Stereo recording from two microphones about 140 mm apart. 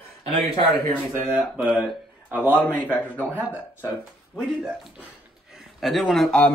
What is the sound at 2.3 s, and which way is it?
Speech, 10° right (ahead or behind).